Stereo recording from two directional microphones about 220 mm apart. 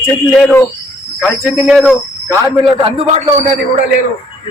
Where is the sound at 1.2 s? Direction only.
Centre (ahead or behind).